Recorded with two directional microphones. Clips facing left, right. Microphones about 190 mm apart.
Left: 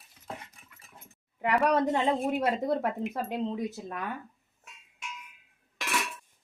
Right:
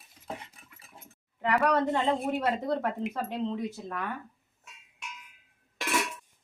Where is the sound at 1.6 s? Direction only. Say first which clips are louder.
Left 1 dB; 20° left (ahead or behind).